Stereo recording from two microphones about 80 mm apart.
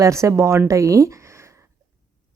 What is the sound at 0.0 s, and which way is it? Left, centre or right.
A woman's voice, right.